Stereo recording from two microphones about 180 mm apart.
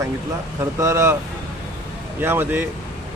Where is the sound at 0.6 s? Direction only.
15° right (ahead or behind).